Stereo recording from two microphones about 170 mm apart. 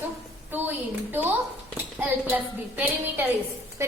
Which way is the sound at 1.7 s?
10° right (ahead or behind).